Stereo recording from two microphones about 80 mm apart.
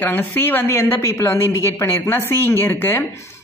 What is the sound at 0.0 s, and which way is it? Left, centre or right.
A woman's voice, left.